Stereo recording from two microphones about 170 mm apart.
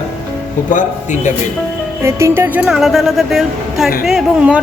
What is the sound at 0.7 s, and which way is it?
Speech, 45° left (ahead or behind).